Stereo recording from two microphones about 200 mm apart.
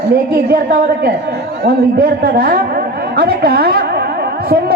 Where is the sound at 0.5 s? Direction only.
50° right (ahead or behind).